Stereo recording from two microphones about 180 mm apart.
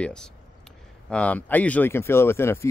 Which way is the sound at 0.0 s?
5° left (ahead or behind).